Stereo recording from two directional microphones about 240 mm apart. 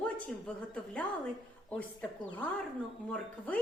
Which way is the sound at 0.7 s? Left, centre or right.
Centre.